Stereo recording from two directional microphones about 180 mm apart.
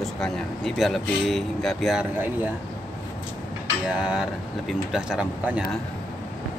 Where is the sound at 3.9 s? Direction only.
5° right (ahead or behind).